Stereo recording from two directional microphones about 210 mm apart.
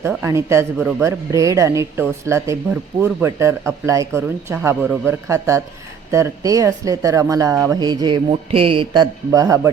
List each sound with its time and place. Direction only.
0.0 s speech: 10° right (ahead or behind)